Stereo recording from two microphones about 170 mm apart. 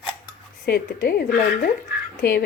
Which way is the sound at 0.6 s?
65° left (ahead or behind).